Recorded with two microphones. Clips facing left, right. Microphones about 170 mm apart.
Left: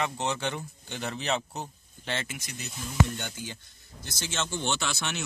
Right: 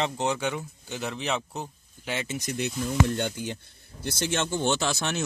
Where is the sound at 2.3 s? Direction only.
45° right (ahead or behind).